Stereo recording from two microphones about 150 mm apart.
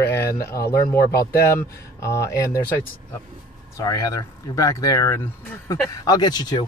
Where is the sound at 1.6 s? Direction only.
20° left (ahead or behind).